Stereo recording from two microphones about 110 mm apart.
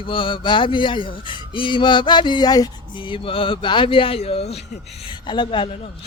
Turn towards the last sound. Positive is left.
turn(degrees=50)  # may be behind; listen again after turning